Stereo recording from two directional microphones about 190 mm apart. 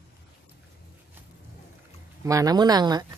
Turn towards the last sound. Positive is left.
turn(degrees=-20)  # may be behind; listen again after turning